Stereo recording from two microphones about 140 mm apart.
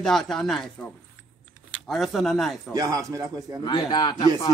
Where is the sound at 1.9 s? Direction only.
Centre (ahead or behind).